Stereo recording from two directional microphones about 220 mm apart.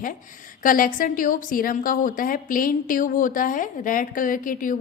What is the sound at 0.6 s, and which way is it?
A woman's voice, 40° left (ahead or behind).